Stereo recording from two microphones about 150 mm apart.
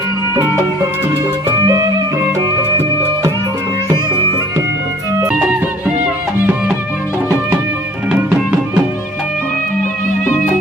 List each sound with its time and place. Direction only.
0.3 s music: 20° right (ahead or behind)
5.2 s music: 10° right (ahead or behind)
8.1 s music: 10° right (ahead or behind)